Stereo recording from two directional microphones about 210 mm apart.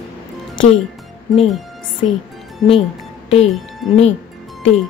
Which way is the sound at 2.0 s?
30° left (ahead or behind).